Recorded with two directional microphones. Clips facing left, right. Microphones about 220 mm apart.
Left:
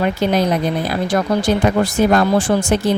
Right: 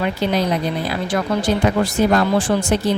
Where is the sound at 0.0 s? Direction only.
45° left (ahead or behind).